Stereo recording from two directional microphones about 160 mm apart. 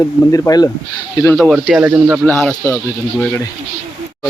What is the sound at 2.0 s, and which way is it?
Speech, 15° right (ahead or behind).